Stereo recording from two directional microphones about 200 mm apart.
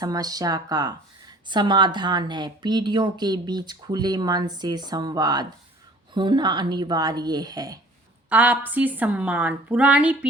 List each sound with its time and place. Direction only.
0.0 s speech: 20° right (ahead or behind)
8.3 s a woman's voice: 5° right (ahead or behind)